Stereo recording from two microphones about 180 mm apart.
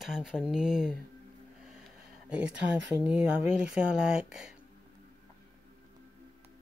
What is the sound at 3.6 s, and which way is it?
Speech, 5° right (ahead or behind).